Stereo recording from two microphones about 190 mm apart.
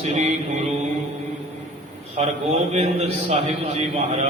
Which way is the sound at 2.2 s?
35° right (ahead or behind).